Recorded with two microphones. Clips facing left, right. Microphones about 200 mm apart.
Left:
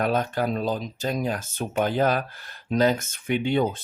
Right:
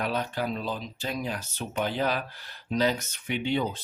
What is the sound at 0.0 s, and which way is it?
Speech, 50° left (ahead or behind).